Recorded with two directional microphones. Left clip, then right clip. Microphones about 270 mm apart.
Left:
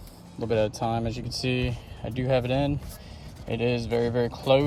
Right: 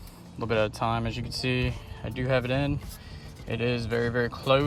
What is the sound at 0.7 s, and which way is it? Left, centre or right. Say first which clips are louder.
Speech: even; right.